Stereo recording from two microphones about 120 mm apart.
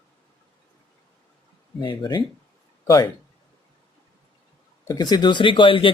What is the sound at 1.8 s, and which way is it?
Speech, 40° left (ahead or behind).